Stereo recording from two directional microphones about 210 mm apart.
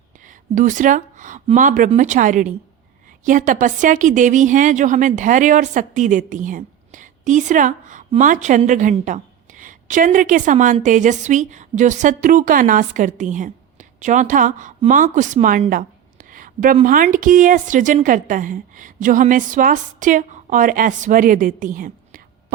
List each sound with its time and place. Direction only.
0.3 s a woman's voice: 40° right (ahead or behind)